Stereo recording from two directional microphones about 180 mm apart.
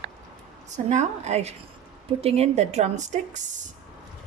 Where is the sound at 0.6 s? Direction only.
40° right (ahead or behind).